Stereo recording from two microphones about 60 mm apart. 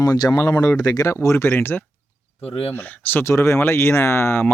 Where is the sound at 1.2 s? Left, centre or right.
Left.